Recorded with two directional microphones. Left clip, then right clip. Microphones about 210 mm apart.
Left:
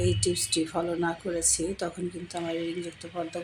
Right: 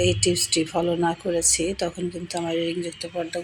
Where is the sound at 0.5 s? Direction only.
5° left (ahead or behind).